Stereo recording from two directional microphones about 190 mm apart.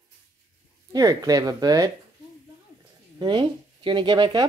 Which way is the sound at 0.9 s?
20° right (ahead or behind).